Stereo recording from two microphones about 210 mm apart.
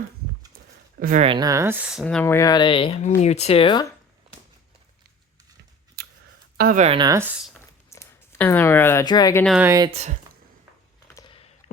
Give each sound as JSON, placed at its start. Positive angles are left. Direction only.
{"t": 0.9, "sound": "speech", "side_deg": -45}
{"t": 1.2, "sound": "speech", "side_deg": -20}
{"t": 2.0, "sound": "speech", "side_deg": 10}
{"t": 6.0, "sound": "scissors", "side_deg": -50}
{"t": 6.6, "sound": "speech", "side_deg": -40}
{"t": 7.9, "sound": "speech", "side_deg": 10}
{"t": 9.4, "sound": "speech", "side_deg": 0}
{"t": 9.6, "sound": "speech", "side_deg": -15}
{"t": 9.9, "sound": "speech", "side_deg": -30}
{"t": 11.1, "sound": "a sound", "side_deg": 20}